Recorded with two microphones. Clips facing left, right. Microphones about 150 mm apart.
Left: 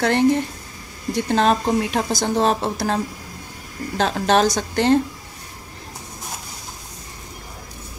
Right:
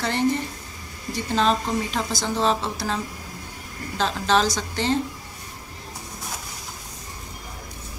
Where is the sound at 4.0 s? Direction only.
55° left (ahead or behind).